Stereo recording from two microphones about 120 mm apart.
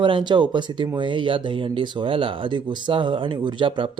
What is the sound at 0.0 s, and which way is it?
Speech, 45° right (ahead or behind).